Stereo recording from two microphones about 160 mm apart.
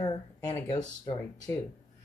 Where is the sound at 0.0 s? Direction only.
20° left (ahead or behind).